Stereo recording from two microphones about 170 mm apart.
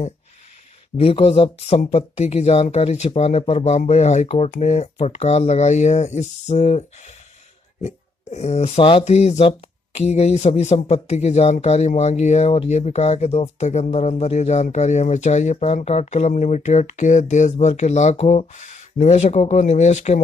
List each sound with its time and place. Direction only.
0.9 s speech: 35° left (ahead or behind)